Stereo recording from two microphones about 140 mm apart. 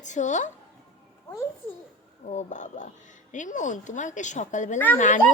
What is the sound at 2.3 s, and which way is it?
A woman's voice, 60° left (ahead or behind).